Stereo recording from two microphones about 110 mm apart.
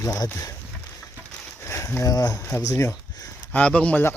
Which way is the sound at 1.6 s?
25° left (ahead or behind).